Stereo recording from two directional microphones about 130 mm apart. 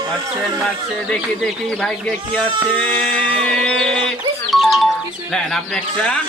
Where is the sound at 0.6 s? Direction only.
5° left (ahead or behind).